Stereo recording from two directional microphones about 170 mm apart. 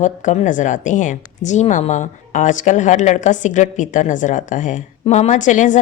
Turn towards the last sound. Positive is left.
turn(degrees=45)  # may be behind; listen again after turning